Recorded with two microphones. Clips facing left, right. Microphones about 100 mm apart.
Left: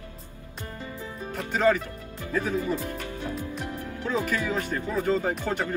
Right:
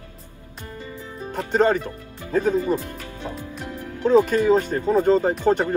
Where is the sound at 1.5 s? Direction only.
35° right (ahead or behind).